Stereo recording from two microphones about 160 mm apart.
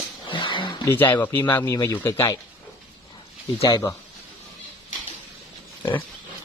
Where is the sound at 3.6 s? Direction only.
20° left (ahead or behind).